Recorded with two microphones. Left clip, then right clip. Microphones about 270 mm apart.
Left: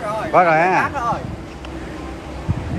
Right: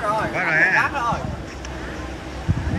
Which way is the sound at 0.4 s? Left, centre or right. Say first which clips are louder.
Left 6 dB; left.